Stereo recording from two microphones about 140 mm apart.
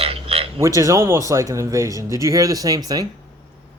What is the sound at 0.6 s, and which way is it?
Speech, 20° right (ahead or behind).